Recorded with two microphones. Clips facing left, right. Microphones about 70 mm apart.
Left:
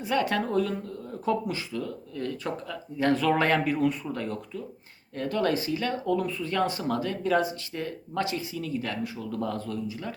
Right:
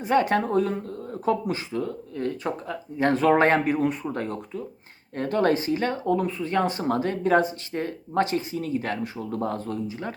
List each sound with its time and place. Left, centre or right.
0.0 s speech: right